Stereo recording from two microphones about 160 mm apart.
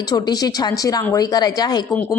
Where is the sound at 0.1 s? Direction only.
25° left (ahead or behind).